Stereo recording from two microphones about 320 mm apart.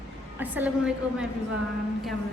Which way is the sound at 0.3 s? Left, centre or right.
Centre.